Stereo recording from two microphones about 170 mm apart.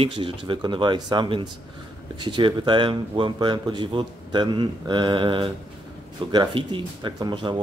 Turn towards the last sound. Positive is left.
turn(degrees=-25)  # may be behind; listen again after turning